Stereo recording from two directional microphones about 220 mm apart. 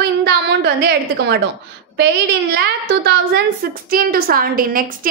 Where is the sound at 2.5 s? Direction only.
50° right (ahead or behind).